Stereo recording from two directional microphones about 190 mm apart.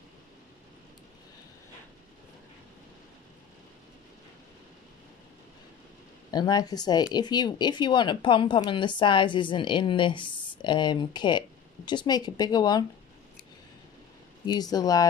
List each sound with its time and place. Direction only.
6.3 s speech: 20° left (ahead or behind)
14.4 s speech: 20° left (ahead or behind)